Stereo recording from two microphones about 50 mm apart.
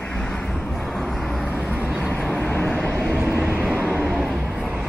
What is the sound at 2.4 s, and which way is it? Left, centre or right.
Vehicle, left.